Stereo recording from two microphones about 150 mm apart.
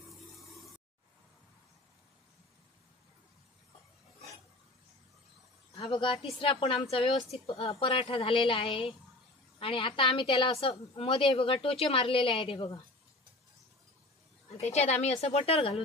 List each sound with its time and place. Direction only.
5.8 s a sound: 35° left (ahead or behind)
6.4 s a woman's voice: 35° left (ahead or behind)
14.6 s a woman's voice: 50° left (ahead or behind)